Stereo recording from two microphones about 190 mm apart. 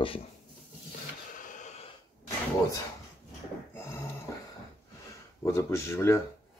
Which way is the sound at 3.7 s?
15° left (ahead or behind).